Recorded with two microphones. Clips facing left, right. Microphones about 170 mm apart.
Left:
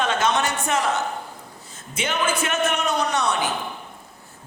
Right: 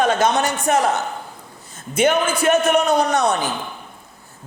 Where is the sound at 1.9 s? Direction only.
40° right (ahead or behind).